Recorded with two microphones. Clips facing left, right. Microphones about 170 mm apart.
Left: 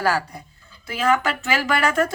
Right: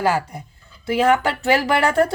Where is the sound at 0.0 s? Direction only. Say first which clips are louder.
Right 2 dB; 20° right (ahead or behind).